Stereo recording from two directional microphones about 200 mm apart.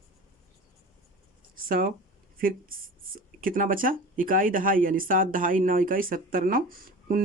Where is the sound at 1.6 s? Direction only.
45° right (ahead or behind).